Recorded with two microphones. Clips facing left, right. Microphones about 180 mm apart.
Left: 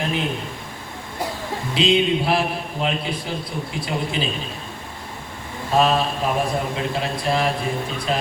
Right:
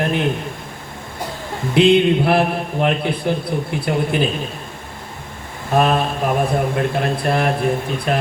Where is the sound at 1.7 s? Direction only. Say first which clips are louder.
Right 6 dB; 60° right (ahead or behind).